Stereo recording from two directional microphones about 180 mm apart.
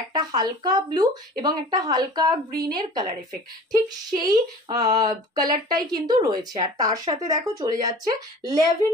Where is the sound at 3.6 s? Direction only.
20° right (ahead or behind).